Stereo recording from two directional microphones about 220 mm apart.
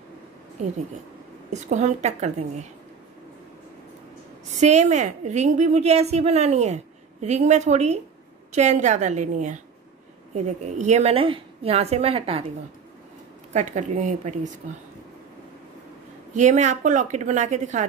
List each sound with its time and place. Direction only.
0.6 s a woman's voice: 30° right (ahead or behind)
4.6 s a woman's voice: 30° right (ahead or behind)
13.5 s a woman's voice: 35° right (ahead or behind)
16.3 s a woman's voice: 35° right (ahead or behind)